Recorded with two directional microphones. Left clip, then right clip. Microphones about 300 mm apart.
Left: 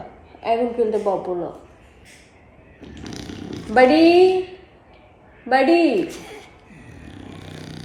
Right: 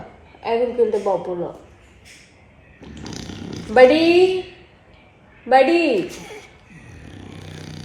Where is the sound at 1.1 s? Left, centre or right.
Centre.